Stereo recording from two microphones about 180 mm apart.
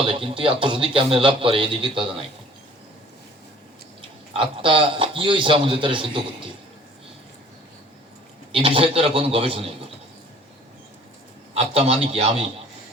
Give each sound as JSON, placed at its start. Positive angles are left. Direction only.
{"t": 0.0, "sound": "a man's voice", "side_deg": -30}
{"t": 4.4, "sound": "a man's voice", "side_deg": -30}
{"t": 8.5, "sound": "a man's voice", "side_deg": -30}
{"t": 11.5, "sound": "a man's voice", "side_deg": -35}